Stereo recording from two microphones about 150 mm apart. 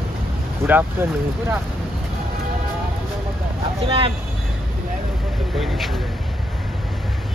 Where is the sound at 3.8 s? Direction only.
35° right (ahead or behind).